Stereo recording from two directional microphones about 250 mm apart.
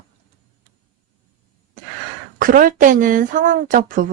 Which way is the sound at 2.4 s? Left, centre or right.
Right.